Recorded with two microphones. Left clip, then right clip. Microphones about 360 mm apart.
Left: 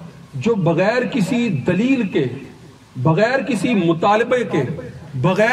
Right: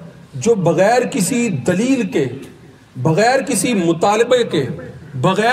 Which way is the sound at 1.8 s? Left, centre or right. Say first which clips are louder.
Right 1 dB; centre.